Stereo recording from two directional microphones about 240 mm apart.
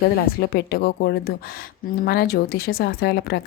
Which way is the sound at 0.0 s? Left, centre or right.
Left.